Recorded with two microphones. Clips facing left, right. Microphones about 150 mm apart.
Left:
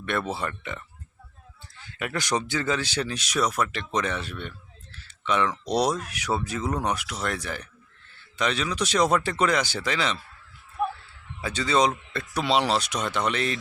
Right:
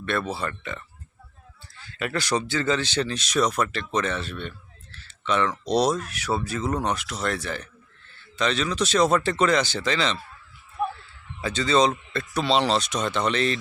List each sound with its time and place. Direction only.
0.0 s speech: 15° left (ahead or behind)
10.8 s a sound: centre (ahead or behind)
11.3 s speech: 10° left (ahead or behind)